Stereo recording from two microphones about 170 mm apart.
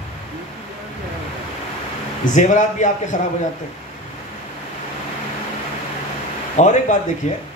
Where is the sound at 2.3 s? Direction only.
45° left (ahead or behind).